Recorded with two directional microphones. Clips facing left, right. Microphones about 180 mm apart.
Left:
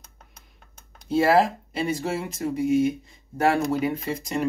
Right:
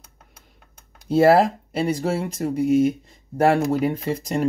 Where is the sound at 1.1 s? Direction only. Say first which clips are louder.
Right 4 dB; 45° right (ahead or behind).